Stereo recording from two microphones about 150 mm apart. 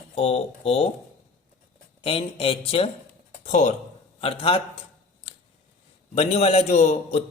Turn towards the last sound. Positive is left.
turn(degrees=50)  # may be behind; listen again after turning